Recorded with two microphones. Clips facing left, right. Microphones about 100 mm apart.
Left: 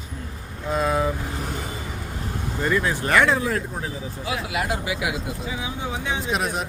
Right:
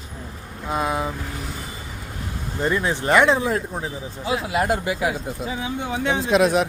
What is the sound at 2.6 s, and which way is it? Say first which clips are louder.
Speech: right 2 dB; 25° right (ahead or behind).